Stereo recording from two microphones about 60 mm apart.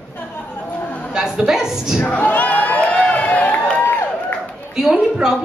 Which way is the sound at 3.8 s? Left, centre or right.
Left.